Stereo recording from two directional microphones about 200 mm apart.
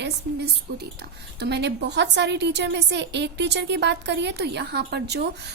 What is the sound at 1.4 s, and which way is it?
A woman's voice, 55° right (ahead or behind).